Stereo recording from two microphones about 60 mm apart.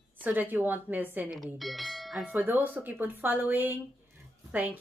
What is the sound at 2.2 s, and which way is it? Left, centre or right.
A woman's voice, right.